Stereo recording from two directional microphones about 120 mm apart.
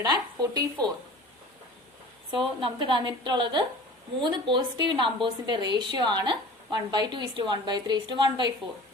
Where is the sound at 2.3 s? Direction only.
45° right (ahead or behind).